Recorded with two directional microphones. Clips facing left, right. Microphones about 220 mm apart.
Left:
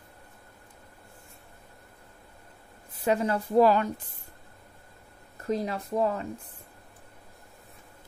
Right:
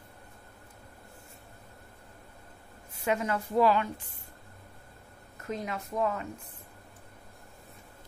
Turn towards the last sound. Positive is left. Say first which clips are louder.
# left 3 dB
turn(degrees=35)  # may be behind; listen again after turning